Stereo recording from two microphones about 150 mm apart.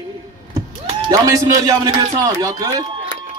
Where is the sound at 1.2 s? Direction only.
20° right (ahead or behind).